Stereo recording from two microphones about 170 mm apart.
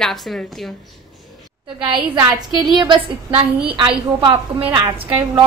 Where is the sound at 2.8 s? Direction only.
30° right (ahead or behind).